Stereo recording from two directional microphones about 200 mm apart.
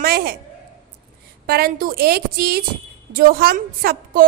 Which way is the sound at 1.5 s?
50° right (ahead or behind).